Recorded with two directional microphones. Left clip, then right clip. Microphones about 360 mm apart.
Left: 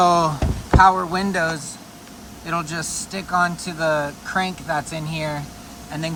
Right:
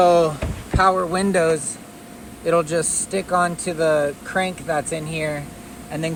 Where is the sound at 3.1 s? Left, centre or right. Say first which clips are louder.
Left 1 dB; centre.